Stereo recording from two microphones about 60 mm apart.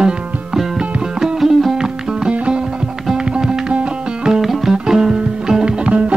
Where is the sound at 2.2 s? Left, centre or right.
Centre.